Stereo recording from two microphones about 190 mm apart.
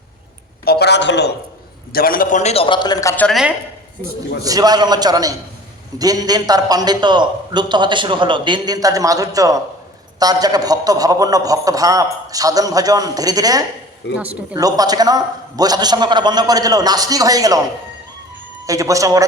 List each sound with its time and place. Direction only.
0.6 s a woman's voice: 55° left (ahead or behind)
1.9 s a man's voice: 50° left (ahead or behind); by 3.2 s 15° left (ahead or behind)
3.2 s a woman's voice: centre (ahead or behind)
4.4 s a man's voice: 20° right (ahead or behind)
14.2 s speech: 10° right (ahead or behind)
14.6 s a man's voice: 20° right (ahead or behind)
18.6 s speech: 15° right (ahead or behind)